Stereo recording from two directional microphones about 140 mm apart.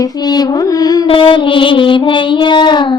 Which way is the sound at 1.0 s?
40° left (ahead or behind).